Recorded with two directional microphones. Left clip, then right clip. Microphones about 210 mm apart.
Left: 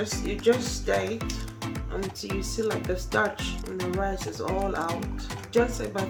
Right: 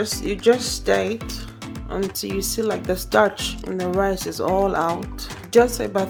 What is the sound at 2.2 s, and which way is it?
Speech, 55° right (ahead or behind).